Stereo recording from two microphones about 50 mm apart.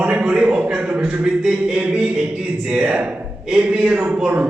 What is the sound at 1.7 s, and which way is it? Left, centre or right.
A man's voice, right.